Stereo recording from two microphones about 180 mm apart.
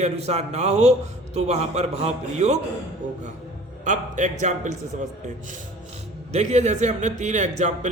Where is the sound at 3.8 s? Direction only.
40° right (ahead or behind).